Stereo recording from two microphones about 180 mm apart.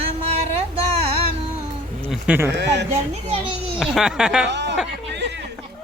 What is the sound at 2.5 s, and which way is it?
Speech, 70° right (ahead or behind).